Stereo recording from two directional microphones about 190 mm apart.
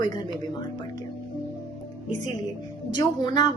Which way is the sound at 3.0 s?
20° left (ahead or behind).